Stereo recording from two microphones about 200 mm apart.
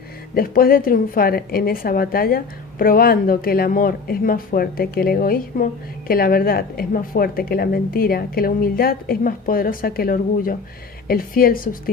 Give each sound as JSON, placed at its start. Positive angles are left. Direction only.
{"t": 0.3, "sound": "a woman's voice", "side_deg": 45}